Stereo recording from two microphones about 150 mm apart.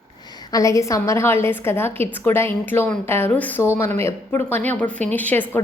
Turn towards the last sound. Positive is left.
turn(degrees=10)  # may be behind; listen again after turning